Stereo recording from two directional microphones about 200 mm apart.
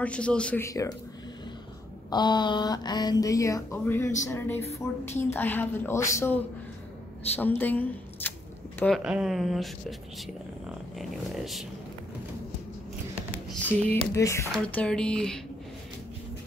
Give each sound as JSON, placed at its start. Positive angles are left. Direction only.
{"t": 0.0, "sound": "speech", "side_deg": 5}
{"t": 2.0, "sound": "speech", "side_deg": 20}
{"t": 13.5, "sound": "speech", "side_deg": 10}